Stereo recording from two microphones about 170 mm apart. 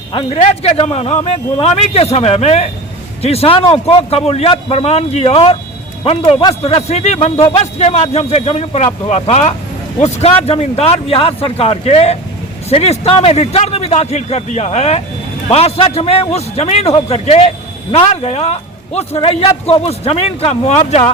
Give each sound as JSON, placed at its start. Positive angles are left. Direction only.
{"t": 0.1, "sound": "a man's voice", "side_deg": 35}